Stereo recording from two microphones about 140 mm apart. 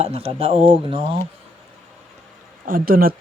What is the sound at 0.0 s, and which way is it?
Speech, 45° right (ahead or behind).